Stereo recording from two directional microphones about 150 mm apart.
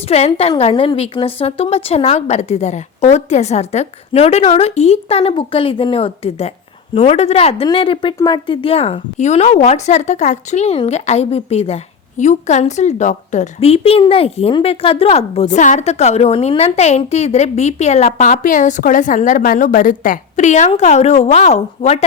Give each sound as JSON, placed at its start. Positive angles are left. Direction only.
{"t": 0.1, "sound": "a woman's voice", "side_deg": 40}